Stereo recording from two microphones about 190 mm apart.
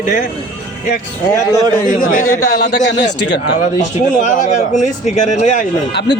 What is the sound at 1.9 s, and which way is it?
Speech, 45° left (ahead or behind).